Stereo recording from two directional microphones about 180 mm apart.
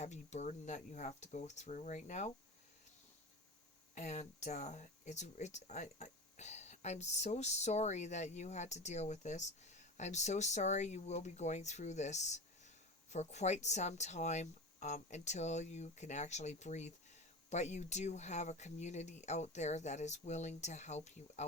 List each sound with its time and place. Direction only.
0.0 s speech: 40° left (ahead or behind)
3.9 s speech: 40° left (ahead or behind)